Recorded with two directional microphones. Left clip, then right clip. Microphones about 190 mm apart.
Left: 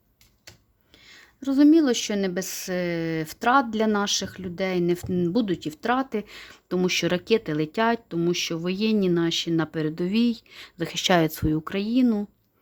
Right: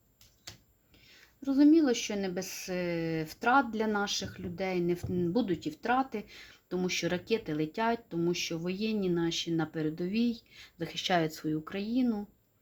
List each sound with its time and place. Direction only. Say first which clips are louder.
1.0 s speech: left 6 dB; 55° left (ahead or behind)